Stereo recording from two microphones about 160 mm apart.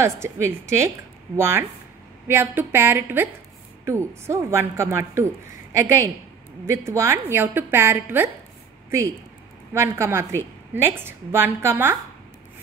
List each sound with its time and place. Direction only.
0.0 s a woman's voice: 15° right (ahead or behind)
9.8 s a woman's voice: 15° right (ahead or behind)